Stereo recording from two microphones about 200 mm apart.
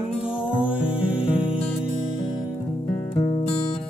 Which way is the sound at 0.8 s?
25° left (ahead or behind).